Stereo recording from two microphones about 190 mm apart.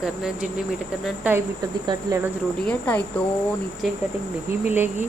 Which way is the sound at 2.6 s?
5° left (ahead or behind).